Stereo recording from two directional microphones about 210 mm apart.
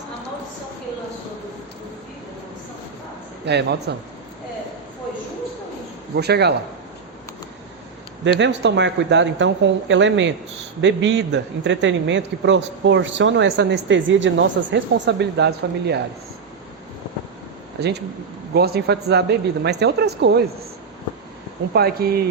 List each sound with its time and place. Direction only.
3.4 s speech: 55° right (ahead or behind)
6.1 s speech: 50° right (ahead or behind)
8.2 s a man's voice: 55° right (ahead or behind)
17.7 s speech: 50° right (ahead or behind)
21.7 s speech: 50° right (ahead or behind)